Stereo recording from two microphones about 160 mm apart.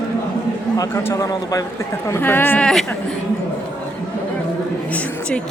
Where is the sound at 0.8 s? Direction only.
20° left (ahead or behind).